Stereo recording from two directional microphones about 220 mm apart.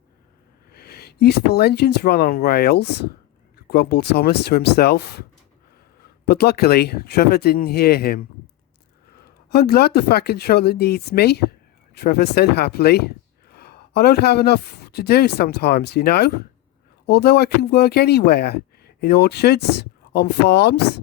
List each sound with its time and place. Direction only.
0.7 s speech: 45° left (ahead or behind)
6.2 s speech: 45° left (ahead or behind)
9.5 s speech: 45° left (ahead or behind)